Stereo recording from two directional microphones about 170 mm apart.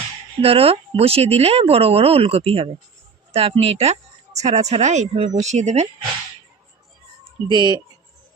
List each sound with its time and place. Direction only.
0.4 s speech: 35° right (ahead or behind)
7.4 s speech: 25° right (ahead or behind)